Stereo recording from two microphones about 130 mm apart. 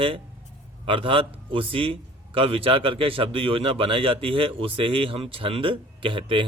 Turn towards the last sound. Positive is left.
turn(degrees=-40)  # may be behind; listen again after turning